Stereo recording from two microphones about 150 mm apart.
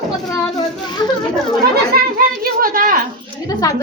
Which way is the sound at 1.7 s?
85° right.